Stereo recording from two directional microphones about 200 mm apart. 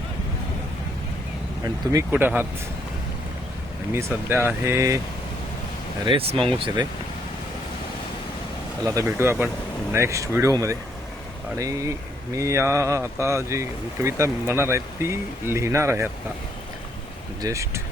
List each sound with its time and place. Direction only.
1.6 s speech: 15° right (ahead or behind)
3.9 s speech: 10° right (ahead or behind)
6.1 s speech: 25° right (ahead or behind)
8.8 s speech: 15° right (ahead or behind)
17.4 s speech: 15° right (ahead or behind)